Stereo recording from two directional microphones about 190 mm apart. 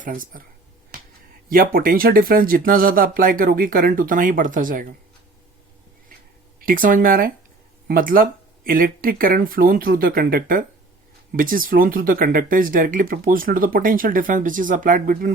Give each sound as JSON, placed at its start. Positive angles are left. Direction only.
{"t": 0.0, "sound": "speech", "side_deg": -45}
{"t": 1.5, "sound": "speech", "side_deg": -45}
{"t": 6.6, "sound": "speech", "side_deg": -45}